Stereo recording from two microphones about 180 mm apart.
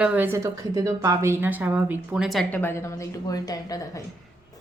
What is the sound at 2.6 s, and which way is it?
A woman's voice, 15° left (ahead or behind).